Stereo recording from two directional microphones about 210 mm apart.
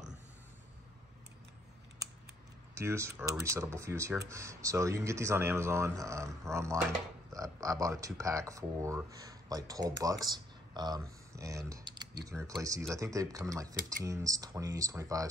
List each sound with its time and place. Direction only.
2.7 s speech: 10° right (ahead or behind)